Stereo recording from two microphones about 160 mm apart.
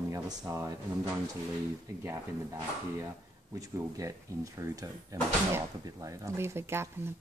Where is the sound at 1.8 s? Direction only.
20° right (ahead or behind).